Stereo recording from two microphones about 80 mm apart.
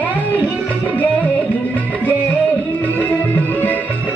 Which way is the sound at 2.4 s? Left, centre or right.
Left.